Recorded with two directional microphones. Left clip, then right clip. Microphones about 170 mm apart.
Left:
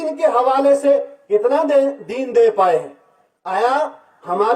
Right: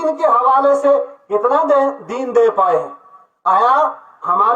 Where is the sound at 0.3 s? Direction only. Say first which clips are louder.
Right 2 dB; 90° left.